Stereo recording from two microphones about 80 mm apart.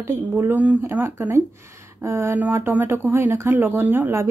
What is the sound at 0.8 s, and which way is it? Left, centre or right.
Speech, right.